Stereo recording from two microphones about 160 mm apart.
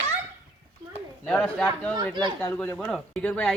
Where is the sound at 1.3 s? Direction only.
5° left (ahead or behind).